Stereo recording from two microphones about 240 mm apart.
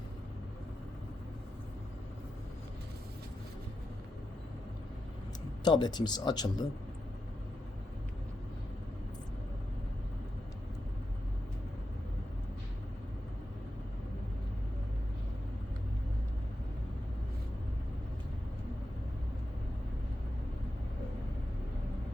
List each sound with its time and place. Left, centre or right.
5.6 s speech: centre